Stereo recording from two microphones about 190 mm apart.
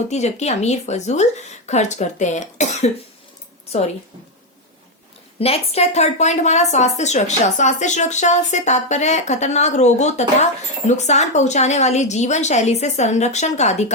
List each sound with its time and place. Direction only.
0.1 s a woman's voice: 35° left (ahead or behind)
5.4 s a woman's voice: 35° left (ahead or behind)